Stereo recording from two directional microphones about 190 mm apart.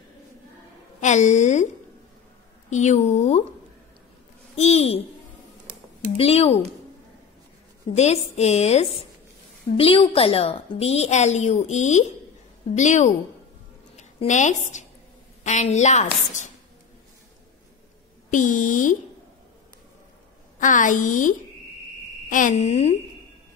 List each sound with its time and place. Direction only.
1.0 s a woman's voice: 40° left (ahead or behind)
2.7 s a woman's voice: 40° left (ahead or behind)
4.6 s a woman's voice: 35° left (ahead or behind)
6.1 s a woman's voice: 30° left (ahead or behind)
7.9 s a woman's voice: 35° left (ahead or behind)
18.3 s a woman's voice: 40° left (ahead or behind)
20.5 s a woman's voice: 40° left (ahead or behind)